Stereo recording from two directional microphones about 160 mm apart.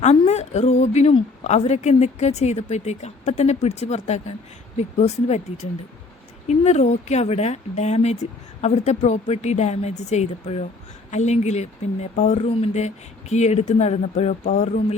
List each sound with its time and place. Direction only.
0.0 s a woman's voice: 45° left (ahead or behind)